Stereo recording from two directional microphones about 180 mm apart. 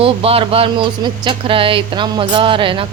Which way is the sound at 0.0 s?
30° right (ahead or behind).